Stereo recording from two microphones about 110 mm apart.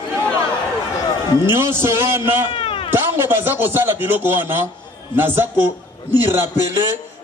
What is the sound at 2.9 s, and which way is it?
A man's voice, 20° right (ahead or behind).